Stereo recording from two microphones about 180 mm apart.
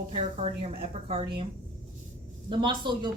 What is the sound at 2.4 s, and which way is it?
Speech, 25° right (ahead or behind).